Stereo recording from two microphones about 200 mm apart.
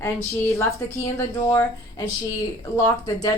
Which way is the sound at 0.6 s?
15° left (ahead or behind).